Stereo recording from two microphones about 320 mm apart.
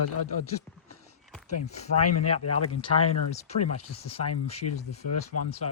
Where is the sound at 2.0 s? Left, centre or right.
Left.